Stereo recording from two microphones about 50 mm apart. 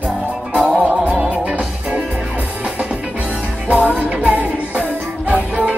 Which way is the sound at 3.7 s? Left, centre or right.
Right.